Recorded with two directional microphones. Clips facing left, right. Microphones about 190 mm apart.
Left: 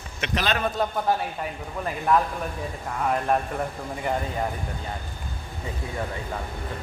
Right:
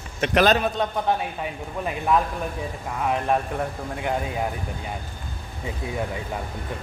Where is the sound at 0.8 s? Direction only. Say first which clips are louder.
Right 1 dB; 5° left (ahead or behind).